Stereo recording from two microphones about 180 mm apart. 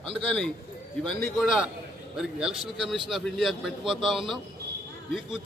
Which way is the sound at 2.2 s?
5° right (ahead or behind).